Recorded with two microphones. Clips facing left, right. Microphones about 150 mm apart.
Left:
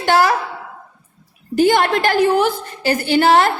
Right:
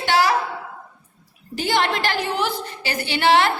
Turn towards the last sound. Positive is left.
turn(degrees=45)  # may be behind; listen again after turning